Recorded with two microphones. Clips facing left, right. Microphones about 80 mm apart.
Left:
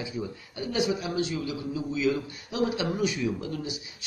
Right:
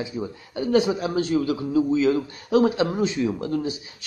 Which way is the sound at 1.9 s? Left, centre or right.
Right.